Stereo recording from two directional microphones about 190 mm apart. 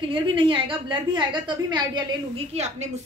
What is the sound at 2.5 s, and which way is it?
Speech, 35° right (ahead or behind).